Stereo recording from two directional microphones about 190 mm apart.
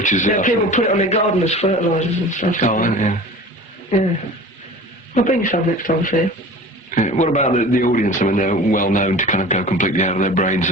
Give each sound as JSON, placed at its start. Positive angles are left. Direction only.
{"t": 0.0, "sound": "a man's voice", "side_deg": 40}
{"t": 5.1, "sound": "a man's voice", "side_deg": 45}